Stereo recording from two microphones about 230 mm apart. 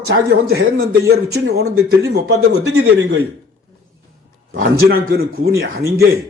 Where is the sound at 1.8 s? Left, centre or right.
Right.